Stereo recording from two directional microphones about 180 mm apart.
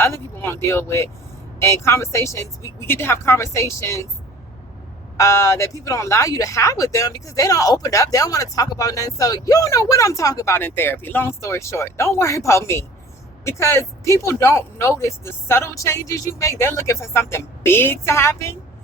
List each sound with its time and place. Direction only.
0.0 s speech: 15° left (ahead or behind)
5.1 s speech: 15° left (ahead or behind)